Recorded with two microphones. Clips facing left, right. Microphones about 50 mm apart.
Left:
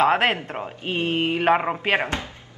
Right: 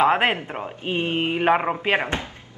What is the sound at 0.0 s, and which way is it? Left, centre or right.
A woman's voice, centre.